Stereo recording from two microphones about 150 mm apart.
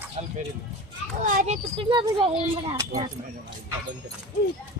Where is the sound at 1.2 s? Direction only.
55° right (ahead or behind).